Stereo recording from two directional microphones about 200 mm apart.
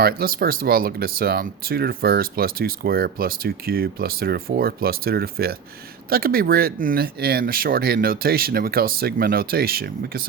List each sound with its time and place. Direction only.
0.0 s speech: 50° right (ahead or behind)